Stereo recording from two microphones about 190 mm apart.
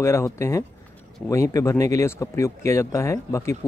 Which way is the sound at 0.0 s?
15° left (ahead or behind).